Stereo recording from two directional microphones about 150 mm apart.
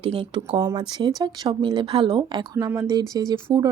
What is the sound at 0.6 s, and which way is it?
A woman's voice, 25° right (ahead or behind).